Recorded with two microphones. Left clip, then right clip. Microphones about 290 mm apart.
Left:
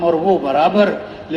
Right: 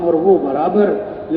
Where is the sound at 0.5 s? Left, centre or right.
Left.